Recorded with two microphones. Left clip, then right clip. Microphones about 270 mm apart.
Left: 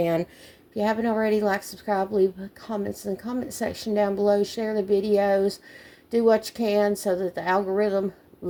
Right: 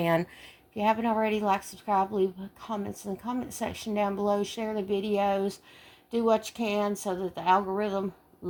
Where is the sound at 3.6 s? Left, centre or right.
Centre.